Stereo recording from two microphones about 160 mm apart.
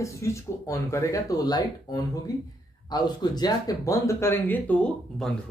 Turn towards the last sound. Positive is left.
turn(degrees=10)  # may be behind; listen again after turning